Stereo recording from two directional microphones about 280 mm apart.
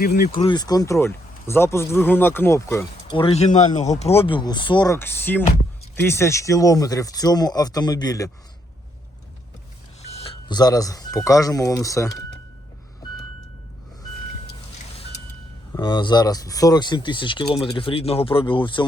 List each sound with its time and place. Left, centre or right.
0.0 s speech: left
0.3 s a man's voice: centre
10.0 s speech: left
15.7 s a man's voice: centre